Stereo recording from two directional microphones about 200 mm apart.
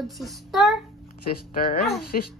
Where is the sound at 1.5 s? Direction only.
45° left (ahead or behind).